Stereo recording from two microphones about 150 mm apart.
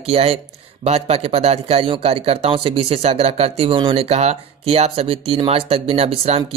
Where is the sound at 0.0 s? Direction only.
40° right (ahead or behind).